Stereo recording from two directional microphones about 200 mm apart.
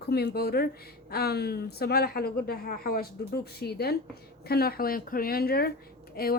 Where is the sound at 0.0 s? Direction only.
55° left (ahead or behind).